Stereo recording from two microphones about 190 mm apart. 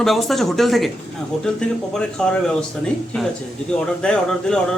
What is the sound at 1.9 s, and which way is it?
A man's voice, 5° left (ahead or behind).